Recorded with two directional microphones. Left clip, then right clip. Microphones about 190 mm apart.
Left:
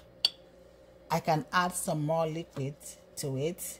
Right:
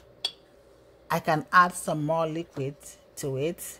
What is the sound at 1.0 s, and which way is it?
Speech, 15° right (ahead or behind).